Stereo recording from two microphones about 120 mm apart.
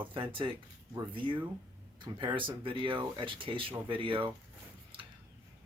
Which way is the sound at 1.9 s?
40° right (ahead or behind).